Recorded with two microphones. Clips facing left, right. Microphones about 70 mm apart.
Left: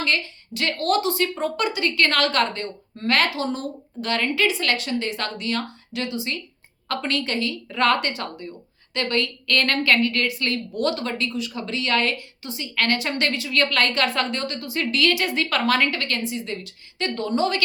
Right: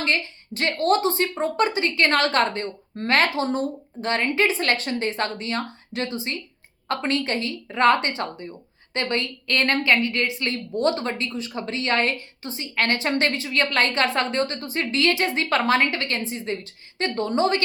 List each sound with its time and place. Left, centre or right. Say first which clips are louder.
0.0 s a woman's voice: even; right